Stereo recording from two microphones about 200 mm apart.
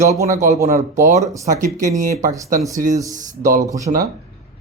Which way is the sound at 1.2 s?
15° right (ahead or behind).